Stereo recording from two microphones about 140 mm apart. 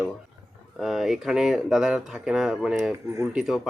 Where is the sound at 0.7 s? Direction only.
Centre (ahead or behind).